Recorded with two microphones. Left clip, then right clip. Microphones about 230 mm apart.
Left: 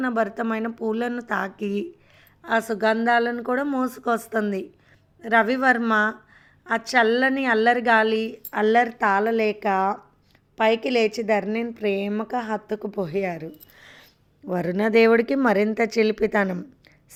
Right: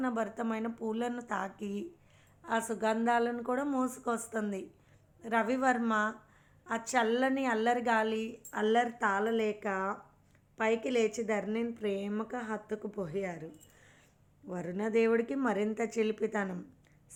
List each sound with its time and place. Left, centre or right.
0.0 s a woman's voice: left